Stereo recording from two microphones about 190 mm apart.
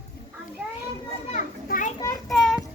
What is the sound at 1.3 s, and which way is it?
Children playing, 40° left (ahead or behind).